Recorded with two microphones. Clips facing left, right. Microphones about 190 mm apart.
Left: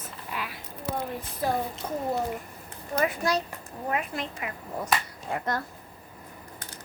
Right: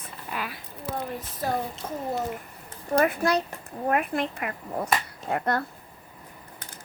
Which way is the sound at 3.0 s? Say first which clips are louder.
Right 1 dB; 55° right (ahead or behind).